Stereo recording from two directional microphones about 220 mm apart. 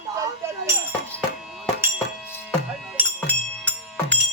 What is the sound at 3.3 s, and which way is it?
Music, 5° left (ahead or behind).